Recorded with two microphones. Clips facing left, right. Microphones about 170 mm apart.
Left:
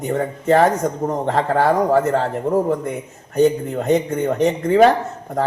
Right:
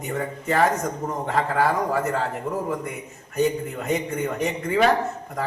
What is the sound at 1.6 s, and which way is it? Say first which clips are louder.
Speech: left 8 dB; 55° left (ahead or behind).